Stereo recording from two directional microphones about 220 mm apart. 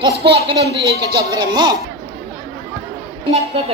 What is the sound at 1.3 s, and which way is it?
Speech, 20° right (ahead or behind).